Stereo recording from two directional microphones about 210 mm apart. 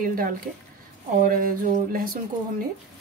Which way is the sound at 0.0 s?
40° right (ahead or behind).